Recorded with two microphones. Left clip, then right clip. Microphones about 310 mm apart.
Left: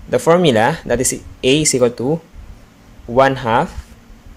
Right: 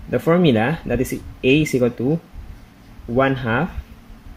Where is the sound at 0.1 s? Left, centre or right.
Centre.